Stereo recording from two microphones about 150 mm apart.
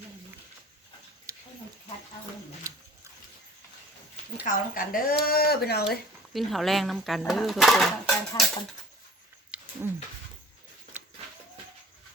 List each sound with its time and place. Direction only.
1.3 s a sound: 20° right (ahead or behind)
2.7 s biting: 20° right (ahead or behind)
4.4 s speech: 70° left (ahead or behind)
5.2 s speech: 80° left
6.3 s speech: centre (ahead or behind)
9.5 s a sound: 10° right (ahead or behind)